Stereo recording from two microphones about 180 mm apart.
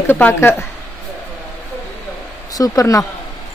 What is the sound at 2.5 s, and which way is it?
Speech, 20° left (ahead or behind).